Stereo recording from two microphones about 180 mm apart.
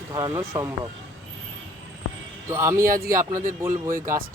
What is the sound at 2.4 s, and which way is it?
Speech, 15° right (ahead or behind).